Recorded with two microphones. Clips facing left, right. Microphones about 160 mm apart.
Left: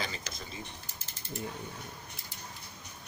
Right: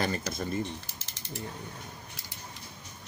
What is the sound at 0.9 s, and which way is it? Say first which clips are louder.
Ratchet: right 2 dB; 90° right.